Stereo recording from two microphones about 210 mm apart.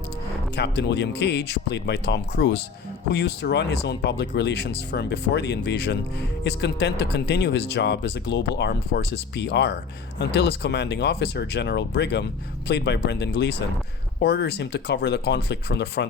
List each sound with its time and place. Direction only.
0.5 s speech: 55° left (ahead or behind)